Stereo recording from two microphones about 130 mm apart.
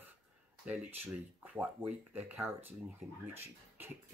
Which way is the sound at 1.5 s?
10° right (ahead or behind).